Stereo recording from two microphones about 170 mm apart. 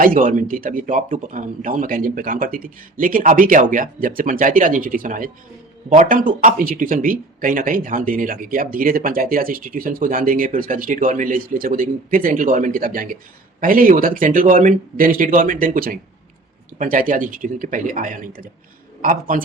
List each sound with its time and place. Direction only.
0.0 s a man's voice: 50° right (ahead or behind)